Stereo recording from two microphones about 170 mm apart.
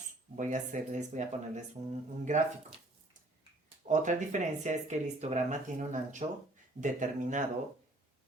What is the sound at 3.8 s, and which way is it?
Speech, 45° right (ahead or behind).